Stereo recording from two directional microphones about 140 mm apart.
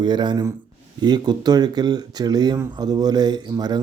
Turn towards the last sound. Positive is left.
turn(degrees=-30)  # may be behind; listen again after turning